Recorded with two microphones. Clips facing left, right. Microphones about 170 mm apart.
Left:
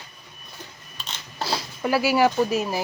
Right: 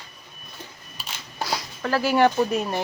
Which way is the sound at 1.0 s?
10° right (ahead or behind).